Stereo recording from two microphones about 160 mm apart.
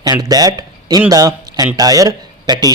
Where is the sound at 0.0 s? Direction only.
25° right (ahead or behind).